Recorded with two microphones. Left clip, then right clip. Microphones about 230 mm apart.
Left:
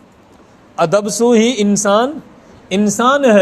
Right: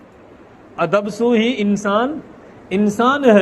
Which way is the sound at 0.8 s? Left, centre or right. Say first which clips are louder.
Left 4 dB; left.